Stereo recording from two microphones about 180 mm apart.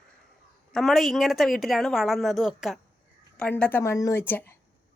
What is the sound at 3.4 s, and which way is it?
Speech, 10° left (ahead or behind).